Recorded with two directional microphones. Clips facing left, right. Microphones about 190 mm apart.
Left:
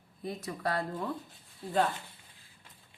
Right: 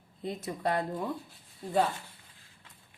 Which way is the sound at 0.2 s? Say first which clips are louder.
Right 2 dB; 25° right (ahead or behind).